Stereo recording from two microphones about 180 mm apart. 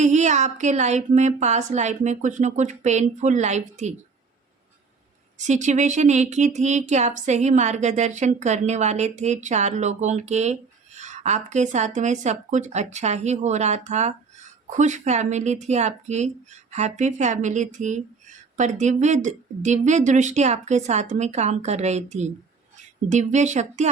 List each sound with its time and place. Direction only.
0.0 s speech: 40° right (ahead or behind)
5.4 s speech: 40° right (ahead or behind)